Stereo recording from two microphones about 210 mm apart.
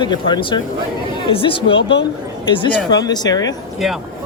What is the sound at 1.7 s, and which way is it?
Speech, 55° left (ahead or behind).